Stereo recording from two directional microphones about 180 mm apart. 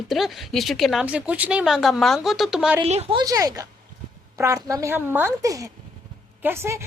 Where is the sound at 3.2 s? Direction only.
20° right (ahead or behind).